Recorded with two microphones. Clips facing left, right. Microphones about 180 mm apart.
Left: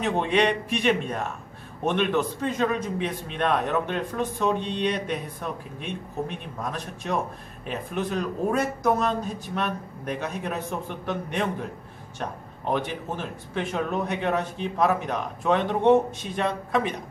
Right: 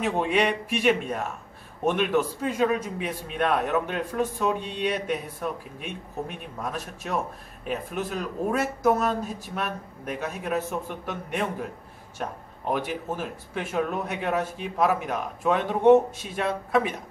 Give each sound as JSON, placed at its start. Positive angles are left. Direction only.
{"t": 0.0, "sound": "a man's voice", "side_deg": -5}